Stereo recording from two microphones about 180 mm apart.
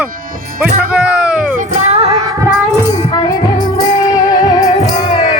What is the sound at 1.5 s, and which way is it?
Music, 40° right (ahead or behind).